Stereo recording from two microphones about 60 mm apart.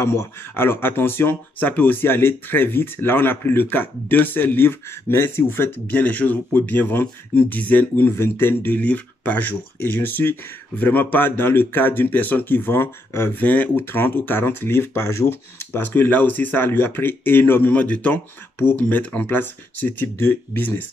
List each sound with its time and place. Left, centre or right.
0.0 s speech: left
13.4 s speech: left